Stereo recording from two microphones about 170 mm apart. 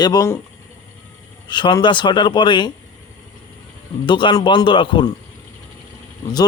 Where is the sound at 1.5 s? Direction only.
25° left (ahead or behind).